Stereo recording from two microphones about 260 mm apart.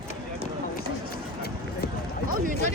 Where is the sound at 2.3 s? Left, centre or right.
Right.